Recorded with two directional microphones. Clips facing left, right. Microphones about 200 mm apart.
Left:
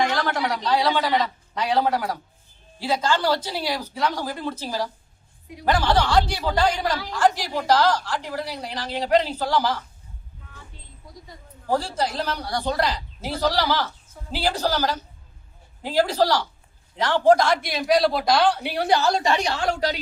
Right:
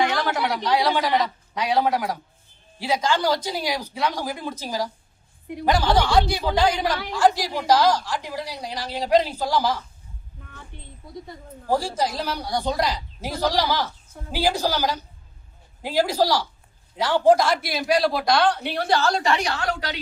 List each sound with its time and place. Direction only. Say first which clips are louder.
0.0 s a man's voice: even; 10° right (ahead or behind)
10.7 s a sound: right 6 dB; 65° right (ahead or behind)
11.7 s a woman's voice: right 1 dB; 10° right (ahead or behind); by 20.0 s 30° left (ahead or behind)